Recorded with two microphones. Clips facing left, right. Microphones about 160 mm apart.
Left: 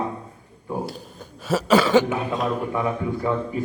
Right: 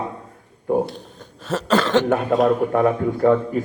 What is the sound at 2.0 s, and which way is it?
A man's voice, 55° right (ahead or behind).